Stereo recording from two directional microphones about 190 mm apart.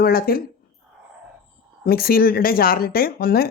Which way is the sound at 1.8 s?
50° left (ahead or behind).